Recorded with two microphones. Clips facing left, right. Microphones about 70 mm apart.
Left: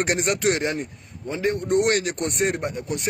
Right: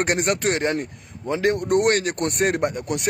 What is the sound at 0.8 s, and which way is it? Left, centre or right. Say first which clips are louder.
Speech: right 2 dB; right.